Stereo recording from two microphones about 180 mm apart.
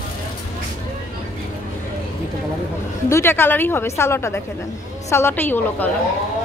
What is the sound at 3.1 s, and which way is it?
A woman's voice, 15° left (ahead or behind).